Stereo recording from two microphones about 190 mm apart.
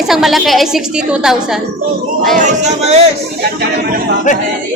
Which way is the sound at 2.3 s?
40° right (ahead or behind).